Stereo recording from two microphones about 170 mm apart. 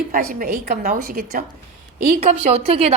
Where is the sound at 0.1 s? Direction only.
55° right (ahead or behind).